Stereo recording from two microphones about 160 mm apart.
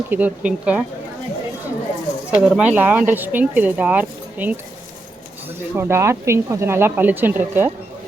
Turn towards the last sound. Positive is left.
turn(degrees=-10)  # may be behind; listen again after turning